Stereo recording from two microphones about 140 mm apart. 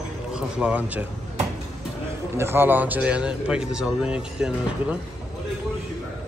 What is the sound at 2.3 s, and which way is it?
A man's voice, 15° right (ahead or behind).